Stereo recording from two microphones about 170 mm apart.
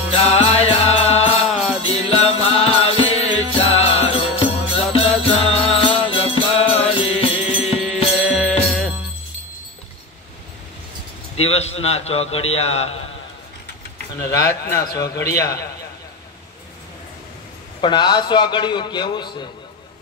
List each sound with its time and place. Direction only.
0.1 s music: 35° left (ahead or behind)
7.8 s music: 5° left (ahead or behind)
11.4 s a man's voice: 40° left (ahead or behind)
14.2 s a man's voice: 20° left (ahead or behind)
17.7 s a man's voice: 25° left (ahead or behind)